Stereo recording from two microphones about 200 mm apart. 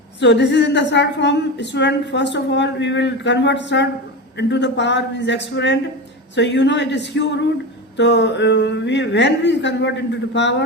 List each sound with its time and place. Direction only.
0.2 s a woman's voice: 60° left (ahead or behind)